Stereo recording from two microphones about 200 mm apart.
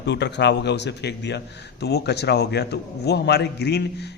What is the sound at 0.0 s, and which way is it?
A man's voice, 60° left (ahead or behind).